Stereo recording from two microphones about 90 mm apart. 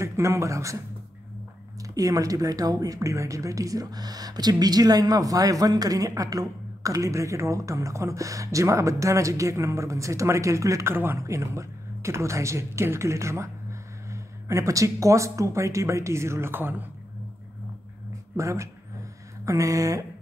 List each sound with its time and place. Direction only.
0.0 s speech: 35° right (ahead or behind)
18.3 s speech: 35° right (ahead or behind)